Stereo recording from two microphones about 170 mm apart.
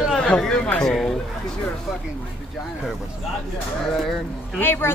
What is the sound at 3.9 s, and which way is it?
Speech, centre (ahead or behind).